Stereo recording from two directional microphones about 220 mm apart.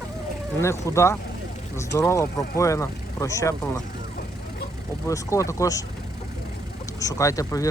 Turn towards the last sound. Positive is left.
turn(degrees=15)  # may be behind; listen again after turning